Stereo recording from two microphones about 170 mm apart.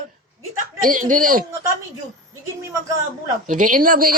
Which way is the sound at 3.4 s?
50° right (ahead or behind).